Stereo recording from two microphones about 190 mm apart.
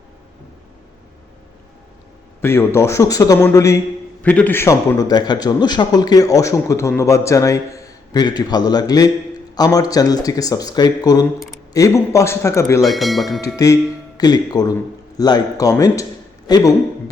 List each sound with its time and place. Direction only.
2.4 s a man's voice: 15° left (ahead or behind)
12.8 s speech: centre (ahead or behind)
13.6 s a man's voice: 20° left (ahead or behind)